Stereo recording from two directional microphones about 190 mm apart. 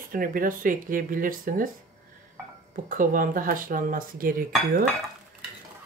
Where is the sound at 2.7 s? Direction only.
45° right (ahead or behind).